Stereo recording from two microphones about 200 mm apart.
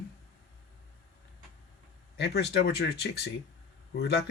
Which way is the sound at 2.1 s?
55° left (ahead or behind).